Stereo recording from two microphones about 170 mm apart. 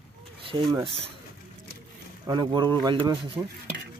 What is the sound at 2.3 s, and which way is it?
Speech, 25° right (ahead or behind).